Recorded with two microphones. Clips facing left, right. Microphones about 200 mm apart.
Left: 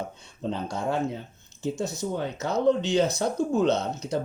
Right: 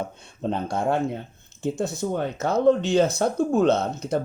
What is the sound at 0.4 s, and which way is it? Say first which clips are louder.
Speech: right 4 dB; 55° right (ahead or behind).